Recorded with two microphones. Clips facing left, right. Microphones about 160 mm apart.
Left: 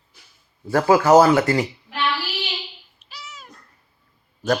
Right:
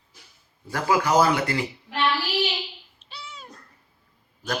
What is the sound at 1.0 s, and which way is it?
Speech, 45° left (ahead or behind).